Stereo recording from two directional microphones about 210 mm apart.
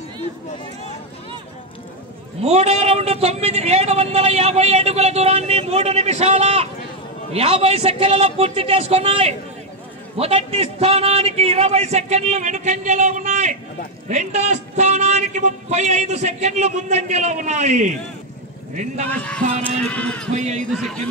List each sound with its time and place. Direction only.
2.4 s a man's voice: 30° right (ahead or behind)
19.0 s music: 5° left (ahead or behind)
20.3 s a man's voice: 35° right (ahead or behind)
20.7 s music: centre (ahead or behind)